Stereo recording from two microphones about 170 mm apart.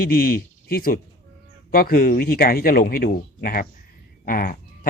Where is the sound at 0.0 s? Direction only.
60° left (ahead or behind).